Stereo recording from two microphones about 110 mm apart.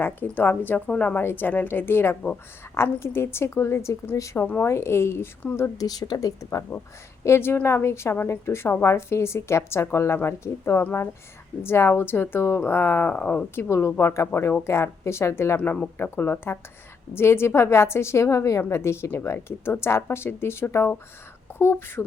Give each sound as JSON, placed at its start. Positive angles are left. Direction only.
{"t": 0.0, "sound": "a woman's voice", "side_deg": 20}
{"t": 5.6, "sound": "a woman's voice", "side_deg": 35}
{"t": 13.7, "sound": "a woman's voice", "side_deg": 25}